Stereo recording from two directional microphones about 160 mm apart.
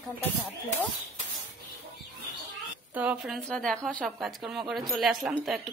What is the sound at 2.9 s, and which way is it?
A woman's voice, 5° right (ahead or behind).